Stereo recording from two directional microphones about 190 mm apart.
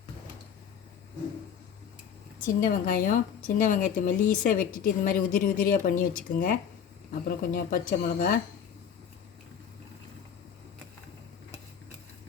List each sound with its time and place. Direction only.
2.8 s speech: 50° left (ahead or behind)